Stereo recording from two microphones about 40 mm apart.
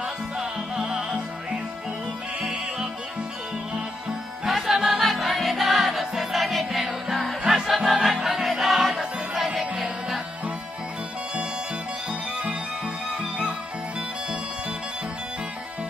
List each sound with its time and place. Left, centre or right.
0.0 s music: centre
4.5 s music: centre
12.1 s music: right